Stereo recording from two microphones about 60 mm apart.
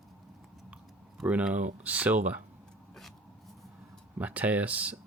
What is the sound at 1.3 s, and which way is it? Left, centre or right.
Speech, right.